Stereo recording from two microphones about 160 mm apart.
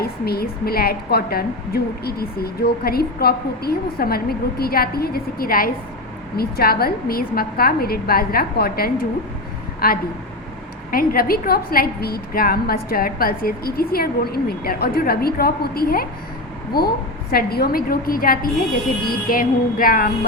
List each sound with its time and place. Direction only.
0.0 s a woman's voice: 75° left (ahead or behind)
17.3 s a woman's voice: 70° left (ahead or behind)